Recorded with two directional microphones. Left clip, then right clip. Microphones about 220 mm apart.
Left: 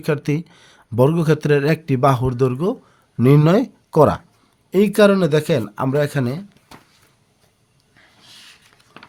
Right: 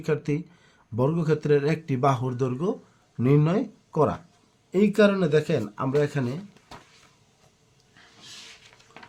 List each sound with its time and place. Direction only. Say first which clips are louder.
0.0 s speech: left 5 dB; 40° left (ahead or behind)